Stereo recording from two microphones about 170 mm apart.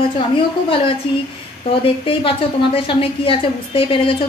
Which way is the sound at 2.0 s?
30° left (ahead or behind).